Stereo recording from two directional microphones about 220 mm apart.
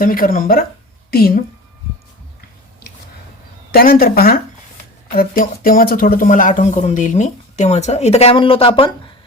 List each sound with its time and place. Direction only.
0.0 s speech: 40° left (ahead or behind)
3.7 s speech: 40° left (ahead or behind); by 8.9 s 25° left (ahead or behind)